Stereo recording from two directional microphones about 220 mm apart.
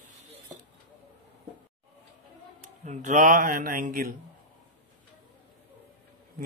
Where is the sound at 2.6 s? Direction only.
35° right (ahead or behind).